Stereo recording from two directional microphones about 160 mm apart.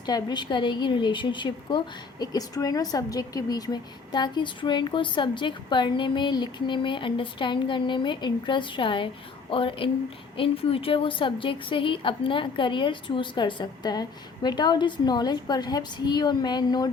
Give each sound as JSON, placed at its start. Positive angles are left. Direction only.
{"t": 0.0, "sound": "a woman's voice", "side_deg": 25}